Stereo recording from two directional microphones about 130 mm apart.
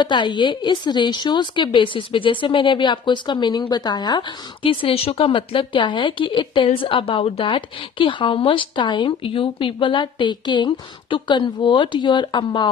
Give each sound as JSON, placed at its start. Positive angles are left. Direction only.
{"t": 0.0, "sound": "speech", "side_deg": 35}
{"t": 4.6, "sound": "speech", "side_deg": 50}